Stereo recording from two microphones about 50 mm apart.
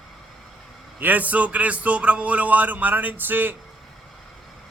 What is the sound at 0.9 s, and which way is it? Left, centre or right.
Speech, right.